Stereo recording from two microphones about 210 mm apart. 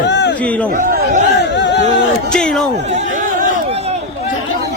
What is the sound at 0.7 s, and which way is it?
Speech, 45° right (ahead or behind).